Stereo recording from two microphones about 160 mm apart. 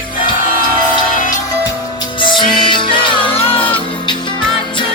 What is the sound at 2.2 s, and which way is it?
Music, 30° left (ahead or behind).